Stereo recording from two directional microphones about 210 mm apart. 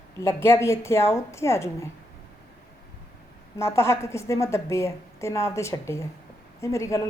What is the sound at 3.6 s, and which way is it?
A woman's voice, 15° left (ahead or behind).